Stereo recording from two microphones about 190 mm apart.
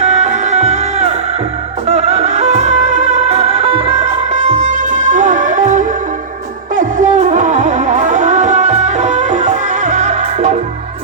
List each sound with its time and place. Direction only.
0.0 s music: 35° right (ahead or behind)